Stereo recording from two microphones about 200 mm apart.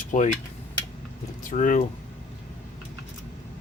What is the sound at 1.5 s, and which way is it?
Speech, 40° left (ahead or behind).